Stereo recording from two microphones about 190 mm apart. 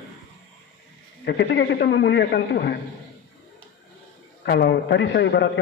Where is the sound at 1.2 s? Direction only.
65° left (ahead or behind).